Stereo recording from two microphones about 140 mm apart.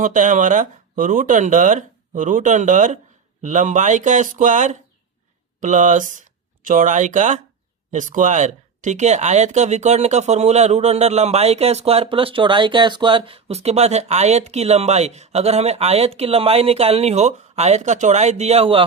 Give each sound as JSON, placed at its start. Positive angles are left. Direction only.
{"t": 0.0, "sound": "speech", "side_deg": -65}